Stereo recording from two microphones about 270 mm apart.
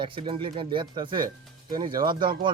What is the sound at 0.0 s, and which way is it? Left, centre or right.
Speech, centre.